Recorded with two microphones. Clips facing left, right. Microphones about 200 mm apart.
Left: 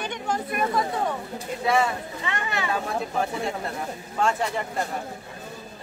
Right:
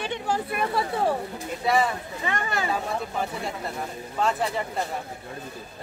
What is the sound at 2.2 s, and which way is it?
Speech, 40° right (ahead or behind).